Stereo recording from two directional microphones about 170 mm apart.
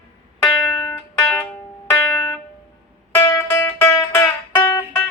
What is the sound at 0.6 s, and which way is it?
Music, 15° left (ahead or behind).